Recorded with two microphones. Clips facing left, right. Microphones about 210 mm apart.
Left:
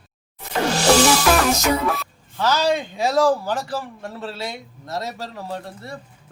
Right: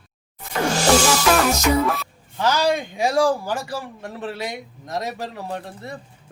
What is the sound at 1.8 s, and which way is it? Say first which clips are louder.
Speech: even; centre (ahead or behind).